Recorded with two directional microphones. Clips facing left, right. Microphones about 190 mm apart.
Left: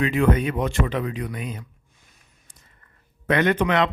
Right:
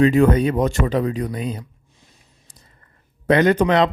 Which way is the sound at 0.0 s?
40° right (ahead or behind).